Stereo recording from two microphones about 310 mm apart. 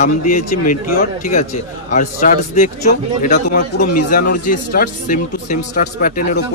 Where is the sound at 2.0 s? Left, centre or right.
Left.